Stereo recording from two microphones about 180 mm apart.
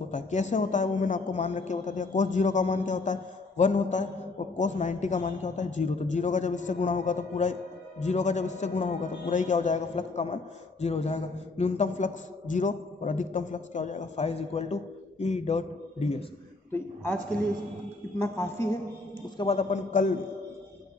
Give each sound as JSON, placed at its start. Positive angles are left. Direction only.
{"t": 0.1, "sound": "a man's voice", "side_deg": 40}
{"t": 16.7, "sound": "a woman's voice", "side_deg": 10}
{"t": 18.2, "sound": "a woman's voice", "side_deg": 15}
{"t": 19.3, "sound": "a man's voice", "side_deg": 35}